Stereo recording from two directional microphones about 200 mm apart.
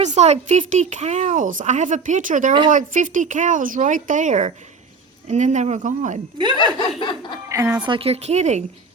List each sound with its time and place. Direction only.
0.0 s speech: 35° right (ahead or behind)
6.7 s laughter: 25° left (ahead or behind)
7.4 s a woman's voice: 15° right (ahead or behind)
7.9 s speech: 30° right (ahead or behind)